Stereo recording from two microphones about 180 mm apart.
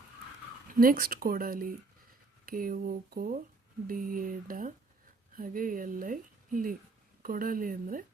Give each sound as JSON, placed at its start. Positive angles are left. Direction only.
{"t": 0.7, "sound": "speech", "side_deg": -50}